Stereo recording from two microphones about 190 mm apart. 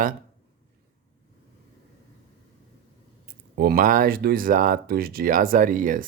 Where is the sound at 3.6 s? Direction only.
50° right (ahead or behind).